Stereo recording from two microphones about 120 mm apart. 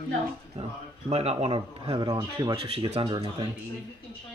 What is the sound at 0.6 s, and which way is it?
Speech, 55° right (ahead or behind).